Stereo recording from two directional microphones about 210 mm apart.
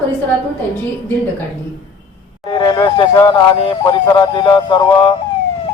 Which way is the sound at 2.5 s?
20° left (ahead or behind).